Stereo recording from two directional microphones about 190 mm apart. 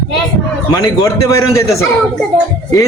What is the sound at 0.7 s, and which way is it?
Speech, 15° left (ahead or behind).